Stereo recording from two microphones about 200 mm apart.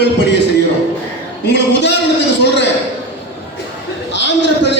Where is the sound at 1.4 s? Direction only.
60° left (ahead or behind).